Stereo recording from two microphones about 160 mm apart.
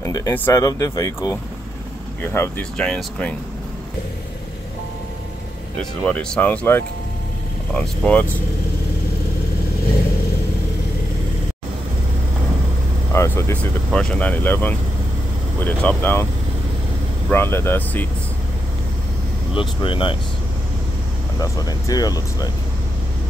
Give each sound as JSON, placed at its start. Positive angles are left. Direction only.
{"t": 0.0, "sound": "speech", "side_deg": 20}
{"t": 5.8, "sound": "speech", "side_deg": 5}
{"t": 13.1, "sound": "speech", "side_deg": 15}
{"t": 17.3, "sound": "speech", "side_deg": 15}
{"t": 19.5, "sound": "speech", "side_deg": 35}
{"t": 21.4, "sound": "speech", "side_deg": 25}